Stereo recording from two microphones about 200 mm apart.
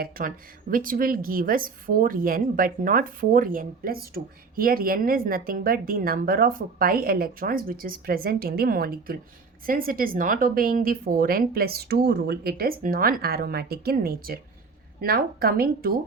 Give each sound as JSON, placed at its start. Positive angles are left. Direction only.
{"t": 0.0, "sound": "a woman's voice", "side_deg": -45}